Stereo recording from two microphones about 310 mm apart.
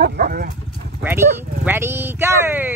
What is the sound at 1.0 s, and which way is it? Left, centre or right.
Speech, centre.